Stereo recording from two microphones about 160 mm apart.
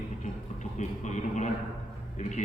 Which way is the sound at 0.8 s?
50° left (ahead or behind).